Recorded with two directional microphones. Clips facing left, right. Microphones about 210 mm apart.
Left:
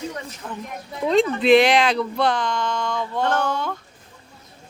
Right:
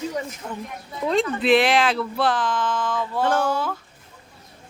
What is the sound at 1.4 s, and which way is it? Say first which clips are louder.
Speech: left 2 dB; centre (ahead or behind).